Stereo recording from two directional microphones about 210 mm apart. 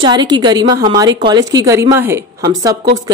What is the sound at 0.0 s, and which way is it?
A woman's voice, 20° right (ahead or behind).